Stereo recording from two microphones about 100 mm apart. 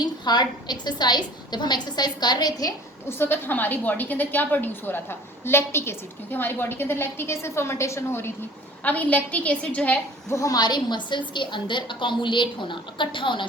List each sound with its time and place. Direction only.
0.0 s a woman's voice: 45° left (ahead or behind)
3.1 s a woman's voice: 20° left (ahead or behind)
8.8 s a woman's voice: 15° left (ahead or behind)
10.2 s a woman's voice: 30° left (ahead or behind); by 13.4 s 55° left (ahead or behind)